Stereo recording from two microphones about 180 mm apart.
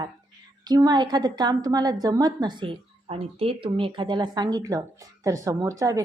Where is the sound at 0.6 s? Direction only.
20° right (ahead or behind).